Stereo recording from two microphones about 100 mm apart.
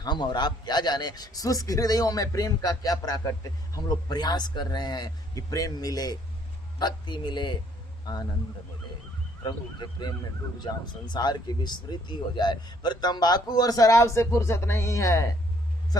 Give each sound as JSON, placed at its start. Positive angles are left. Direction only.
{"t": 0.0, "sound": "speech", "side_deg": 50}
{"t": 9.4, "sound": "speech", "side_deg": 50}